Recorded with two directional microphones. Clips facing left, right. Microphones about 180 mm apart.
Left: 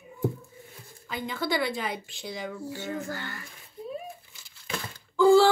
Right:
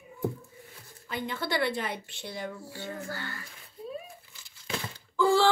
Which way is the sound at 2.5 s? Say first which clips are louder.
Left 4 dB; 15° left (ahead or behind).